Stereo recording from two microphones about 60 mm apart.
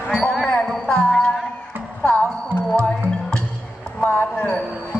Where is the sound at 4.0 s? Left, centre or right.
Left.